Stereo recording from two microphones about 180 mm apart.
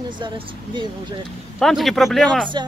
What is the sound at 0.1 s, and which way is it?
Speech, 25° right (ahead or behind).